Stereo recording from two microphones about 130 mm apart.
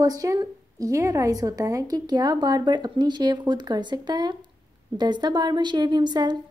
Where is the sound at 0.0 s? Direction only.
25° right (ahead or behind).